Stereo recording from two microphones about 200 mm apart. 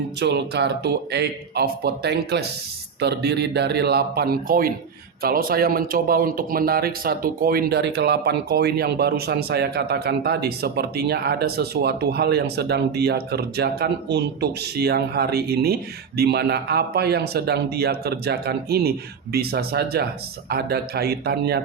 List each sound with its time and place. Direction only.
0.2 s speech: 60° right (ahead or behind)